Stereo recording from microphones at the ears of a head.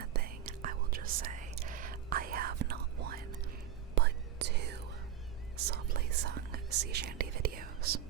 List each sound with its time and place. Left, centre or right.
0.0 s whispering: right